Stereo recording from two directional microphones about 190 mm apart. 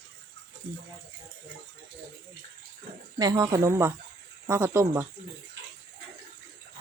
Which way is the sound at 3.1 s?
20° right (ahead or behind).